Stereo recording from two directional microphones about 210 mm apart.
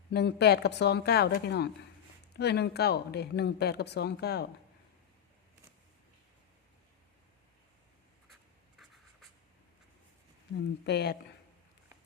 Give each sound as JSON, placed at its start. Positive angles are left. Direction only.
{"t": 0.1, "sound": "speech", "side_deg": 55}
{"t": 10.8, "sound": "speech", "side_deg": 50}